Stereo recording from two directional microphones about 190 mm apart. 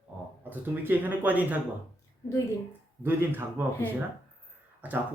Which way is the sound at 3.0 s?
10° right (ahead or behind).